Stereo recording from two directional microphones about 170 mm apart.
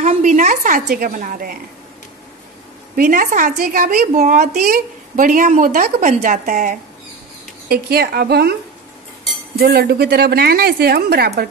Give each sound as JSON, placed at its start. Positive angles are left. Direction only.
{"t": 0.0, "sound": "a woman's voice", "side_deg": -45}
{"t": 3.0, "sound": "a woman's voice", "side_deg": -50}
{"t": 4.6, "sound": "a woman's voice", "side_deg": -60}
{"t": 7.7, "sound": "a woman's voice", "side_deg": -65}
{"t": 9.6, "sound": "a woman's voice", "side_deg": -70}